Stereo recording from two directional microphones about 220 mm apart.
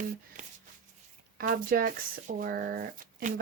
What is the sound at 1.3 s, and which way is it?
Speech, 40° right (ahead or behind).